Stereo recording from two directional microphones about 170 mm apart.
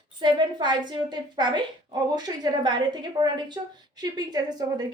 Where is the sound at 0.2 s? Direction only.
25° right (ahead or behind).